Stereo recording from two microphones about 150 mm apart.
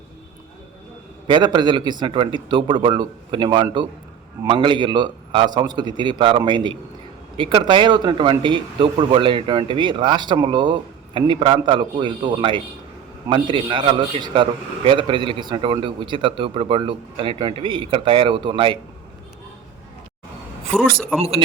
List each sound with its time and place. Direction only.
1.3 s a man's voice: 30° right (ahead or behind)
21.2 s speech: 40° right (ahead or behind)